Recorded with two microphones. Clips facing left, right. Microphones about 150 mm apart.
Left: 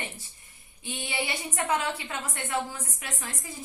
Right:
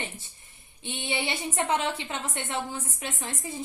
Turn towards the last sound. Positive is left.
turn(degrees=-25)  # may be behind; listen again after turning